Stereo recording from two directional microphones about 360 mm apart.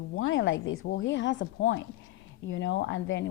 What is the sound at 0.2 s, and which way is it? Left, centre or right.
A woman's voice, left.